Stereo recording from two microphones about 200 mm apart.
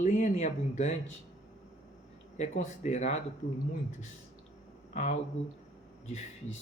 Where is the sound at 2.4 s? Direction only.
35° left (ahead or behind).